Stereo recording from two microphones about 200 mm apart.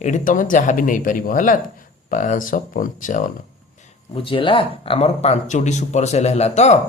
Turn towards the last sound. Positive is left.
turn(degrees=35)  # may be behind; listen again after turning